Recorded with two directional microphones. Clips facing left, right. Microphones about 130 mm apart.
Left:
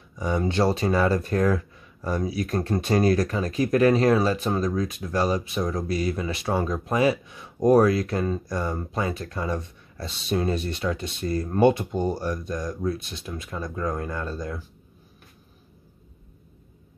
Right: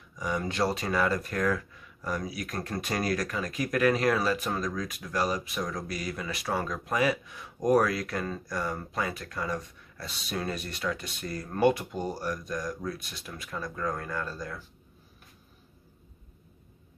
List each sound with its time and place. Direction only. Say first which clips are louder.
0.1 s speech: left 6 dB; 30° left (ahead or behind)